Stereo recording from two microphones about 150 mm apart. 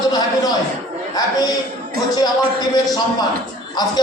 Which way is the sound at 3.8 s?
25° left (ahead or behind).